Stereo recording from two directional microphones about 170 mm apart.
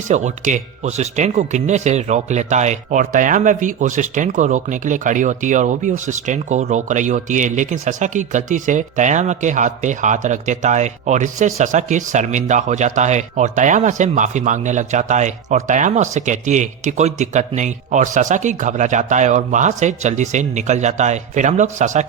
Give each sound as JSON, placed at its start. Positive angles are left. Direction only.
{"t": 0.1, "sound": "speech", "side_deg": -45}